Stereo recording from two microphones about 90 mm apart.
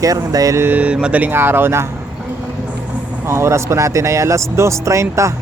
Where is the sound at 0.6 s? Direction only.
20° right (ahead or behind).